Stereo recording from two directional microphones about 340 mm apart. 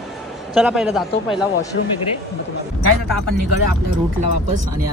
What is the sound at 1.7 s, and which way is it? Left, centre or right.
Speech, left.